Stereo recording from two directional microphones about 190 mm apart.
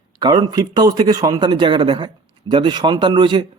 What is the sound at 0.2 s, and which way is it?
A man's voice, 20° right (ahead or behind).